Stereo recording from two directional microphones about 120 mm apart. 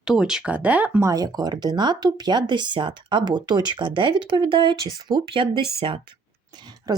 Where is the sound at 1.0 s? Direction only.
30° right (ahead or behind).